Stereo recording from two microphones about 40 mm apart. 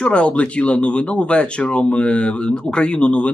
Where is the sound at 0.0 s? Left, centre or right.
Left.